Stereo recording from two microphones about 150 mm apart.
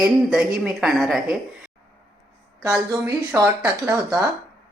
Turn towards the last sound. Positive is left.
turn(degrees=-15)  # may be behind; listen again after turning